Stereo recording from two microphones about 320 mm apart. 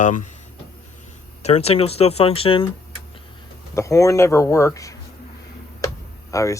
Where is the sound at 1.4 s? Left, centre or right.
Centre.